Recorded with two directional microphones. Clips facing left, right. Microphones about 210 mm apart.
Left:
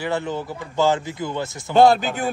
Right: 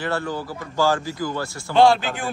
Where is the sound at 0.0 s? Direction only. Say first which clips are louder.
Left 1 dB; 20° left (ahead or behind).